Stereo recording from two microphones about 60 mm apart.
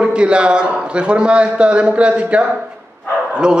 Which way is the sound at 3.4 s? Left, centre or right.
Centre.